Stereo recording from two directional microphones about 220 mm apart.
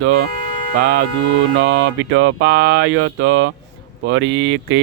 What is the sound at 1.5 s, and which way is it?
Speech, 60° right (ahead or behind).